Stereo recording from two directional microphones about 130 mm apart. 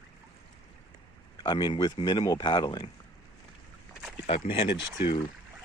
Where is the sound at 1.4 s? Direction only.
35° left (ahead or behind).